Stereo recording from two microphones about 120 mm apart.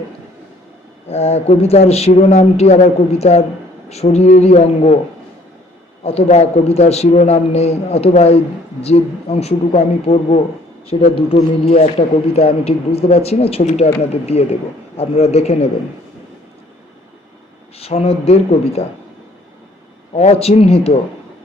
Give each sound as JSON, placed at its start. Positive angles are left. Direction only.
{"t": 1.0, "sound": "speech", "side_deg": 60}
{"t": 6.0, "sound": "speech", "side_deg": 60}
{"t": 17.7, "sound": "speech", "side_deg": 55}
{"t": 20.1, "sound": "speech", "side_deg": 60}